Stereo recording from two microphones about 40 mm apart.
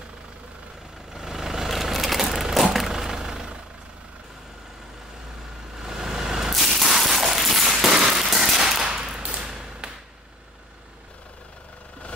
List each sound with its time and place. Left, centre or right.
1.1 s vehicle: centre
5.8 s vehicle: centre
6.5 s machine gun: centre
9.3 s a sound: centre